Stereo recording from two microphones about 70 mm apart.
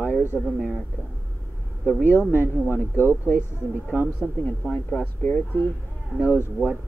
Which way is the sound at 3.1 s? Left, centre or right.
Right.